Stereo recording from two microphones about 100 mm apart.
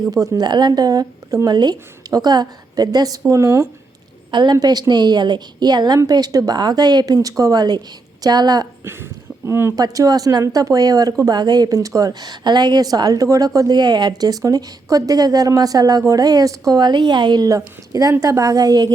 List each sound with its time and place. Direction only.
0.1 s speech: 40° right (ahead or behind)
4.3 s a woman's voice: 50° right (ahead or behind)
8.8 s speech: 25° right (ahead or behind)
9.7 s speech: 35° right (ahead or behind)